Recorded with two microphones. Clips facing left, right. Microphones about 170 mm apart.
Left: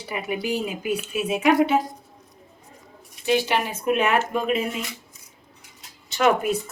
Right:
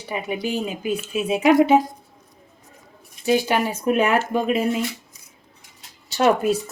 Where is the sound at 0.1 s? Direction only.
25° right (ahead or behind).